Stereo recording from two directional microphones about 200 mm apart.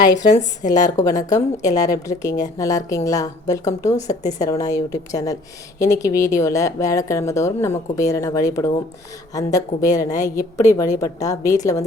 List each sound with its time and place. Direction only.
0.0 s a woman's voice: 20° left (ahead or behind)